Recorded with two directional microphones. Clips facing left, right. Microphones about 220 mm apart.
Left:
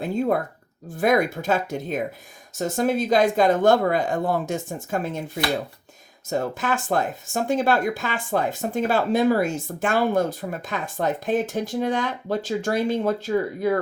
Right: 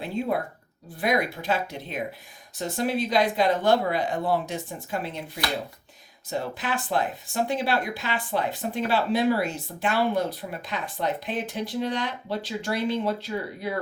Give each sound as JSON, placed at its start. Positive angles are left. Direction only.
{"t": 0.0, "sound": "speech", "side_deg": 45}
{"t": 6.3, "sound": "speech", "side_deg": 45}